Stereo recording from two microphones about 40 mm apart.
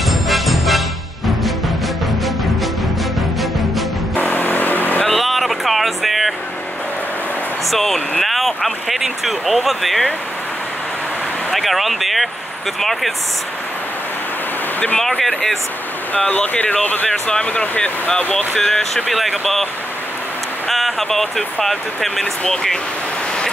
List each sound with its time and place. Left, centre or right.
0.1 s music: centre
4.1 s vehicle: left
5.0 s music: centre
7.7 s speech: centre
11.5 s speech: centre
15.0 s speech: centre
16.3 s speech: left
16.8 s speech: left
17.1 s speech: left
17.5 s speech: left
18.6 s speech: centre
19.0 s speech: centre
20.7 s speech: centre
22.2 s speech: left